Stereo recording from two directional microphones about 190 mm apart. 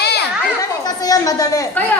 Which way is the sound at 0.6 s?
20° left (ahead or behind).